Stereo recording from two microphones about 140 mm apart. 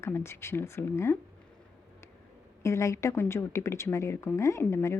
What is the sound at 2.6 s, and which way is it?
Speech, 20° left (ahead or behind).